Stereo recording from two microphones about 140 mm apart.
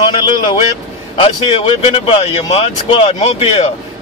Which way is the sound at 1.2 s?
45° left (ahead or behind).